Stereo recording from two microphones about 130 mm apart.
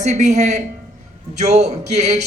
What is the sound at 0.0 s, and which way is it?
Speech, 65° right (ahead or behind).